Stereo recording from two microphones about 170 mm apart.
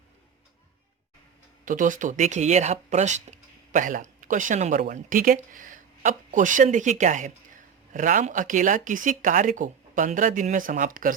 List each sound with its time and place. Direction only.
1.6 s speech: 50° right (ahead or behind)